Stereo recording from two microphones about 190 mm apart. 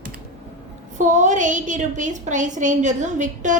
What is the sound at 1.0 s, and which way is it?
A woman's voice, 40° right (ahead or behind).